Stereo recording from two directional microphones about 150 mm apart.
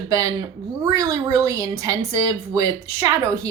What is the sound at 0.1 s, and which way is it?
A woman's voice, 20° right (ahead or behind).